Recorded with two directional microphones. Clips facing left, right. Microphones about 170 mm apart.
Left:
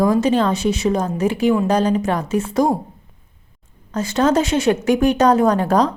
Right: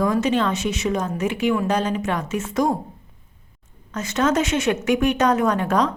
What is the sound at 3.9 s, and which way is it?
Speech, 35° left (ahead or behind).